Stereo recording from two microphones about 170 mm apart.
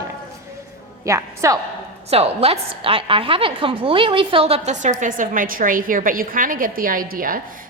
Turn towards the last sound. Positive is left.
turn(degrees=-55)  # may be behind; listen again after turning